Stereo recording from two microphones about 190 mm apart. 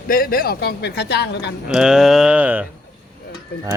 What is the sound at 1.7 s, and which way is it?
Mantra, 5° right (ahead or behind).